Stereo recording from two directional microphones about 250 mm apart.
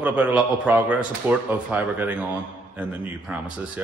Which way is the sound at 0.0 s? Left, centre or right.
Centre.